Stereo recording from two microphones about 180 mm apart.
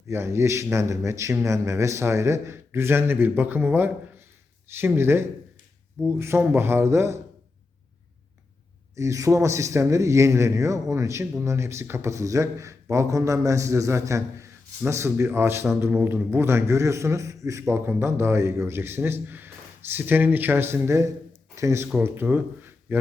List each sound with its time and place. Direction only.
0.1 s a man's voice: 15° right (ahead or behind)
9.0 s a man's voice: 15° right (ahead or behind)